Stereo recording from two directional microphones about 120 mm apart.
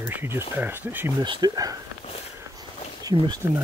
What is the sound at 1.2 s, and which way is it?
Speech, 35° right (ahead or behind).